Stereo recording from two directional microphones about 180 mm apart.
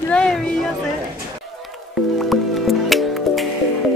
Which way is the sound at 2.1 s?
Centre (ahead or behind).